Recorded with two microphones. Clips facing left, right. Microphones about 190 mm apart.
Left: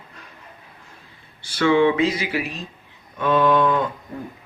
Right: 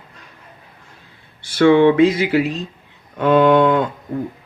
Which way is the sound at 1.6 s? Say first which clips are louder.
Right 6 dB; 55° right (ahead or behind).